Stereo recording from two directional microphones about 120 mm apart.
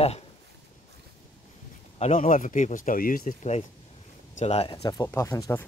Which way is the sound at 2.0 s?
75° left (ahead or behind).